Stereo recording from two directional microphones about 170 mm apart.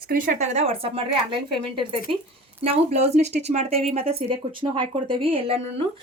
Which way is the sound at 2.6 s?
35° right (ahead or behind).